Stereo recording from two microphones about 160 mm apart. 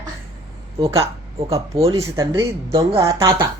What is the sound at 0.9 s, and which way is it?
Speech, 35° right (ahead or behind).